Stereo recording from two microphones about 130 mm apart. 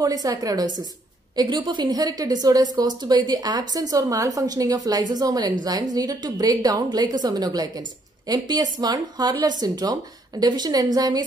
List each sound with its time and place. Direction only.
0.0 s a woman's voice: 30° right (ahead or behind)